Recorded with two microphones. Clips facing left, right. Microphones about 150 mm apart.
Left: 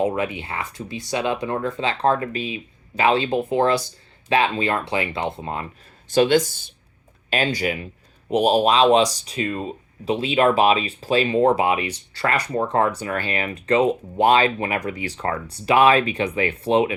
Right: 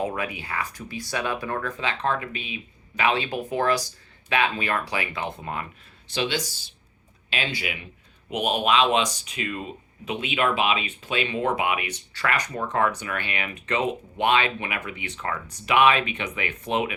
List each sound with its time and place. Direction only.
0.0 s speech: 25° left (ahead or behind)
6.1 s speech: 50° left (ahead or behind); by 16.9 s 30° left (ahead or behind)